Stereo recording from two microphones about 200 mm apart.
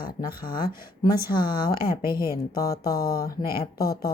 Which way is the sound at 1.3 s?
20° left (ahead or behind).